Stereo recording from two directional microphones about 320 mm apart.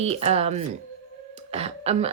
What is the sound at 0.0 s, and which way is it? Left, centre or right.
Speech, centre.